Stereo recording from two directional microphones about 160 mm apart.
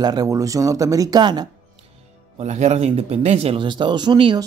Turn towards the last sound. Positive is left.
turn(degrees=-30)  # may be behind; listen again after turning